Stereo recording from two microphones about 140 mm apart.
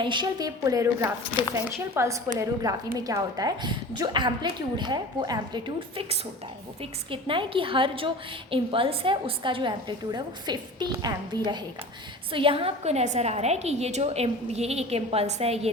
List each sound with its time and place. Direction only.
0.0 s a woman's voice: 35° right (ahead or behind)